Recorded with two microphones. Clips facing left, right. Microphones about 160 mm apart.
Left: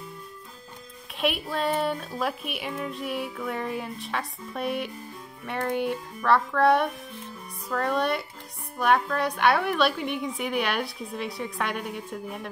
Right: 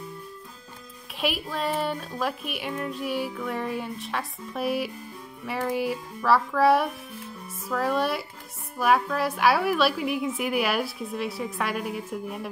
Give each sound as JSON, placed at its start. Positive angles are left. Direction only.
{"t": 1.2, "sound": "a woman's voice", "side_deg": 0}